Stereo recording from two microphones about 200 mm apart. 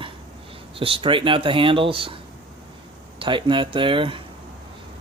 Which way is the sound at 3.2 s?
25° right (ahead or behind).